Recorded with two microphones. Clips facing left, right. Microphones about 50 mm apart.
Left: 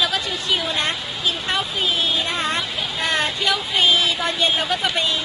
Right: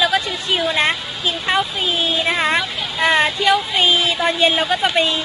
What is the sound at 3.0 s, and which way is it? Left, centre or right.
Speech, right.